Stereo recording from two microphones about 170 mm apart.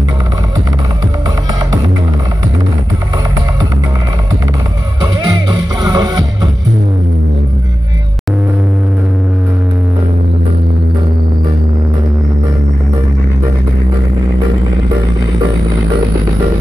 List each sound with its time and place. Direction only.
5.0 s music: 25° right (ahead or behind)